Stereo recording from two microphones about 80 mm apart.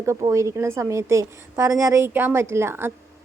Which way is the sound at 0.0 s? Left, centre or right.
Right.